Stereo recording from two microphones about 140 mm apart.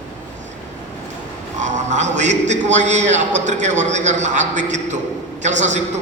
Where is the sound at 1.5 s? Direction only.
60° right (ahead or behind).